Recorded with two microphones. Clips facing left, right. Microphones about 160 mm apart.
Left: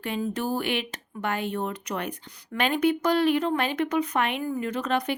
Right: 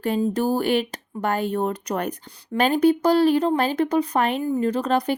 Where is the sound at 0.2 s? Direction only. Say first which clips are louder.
Right 4 dB; 40° right (ahead or behind).